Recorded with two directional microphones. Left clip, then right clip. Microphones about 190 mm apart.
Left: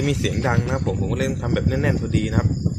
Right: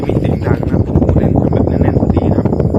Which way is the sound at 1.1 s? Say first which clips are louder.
Right 10 dB; 15° left (ahead or behind).